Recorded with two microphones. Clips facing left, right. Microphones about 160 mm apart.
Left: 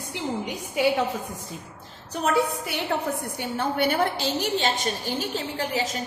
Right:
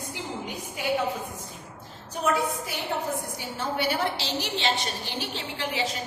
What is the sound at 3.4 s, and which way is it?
A woman's voice, 55° left (ahead or behind).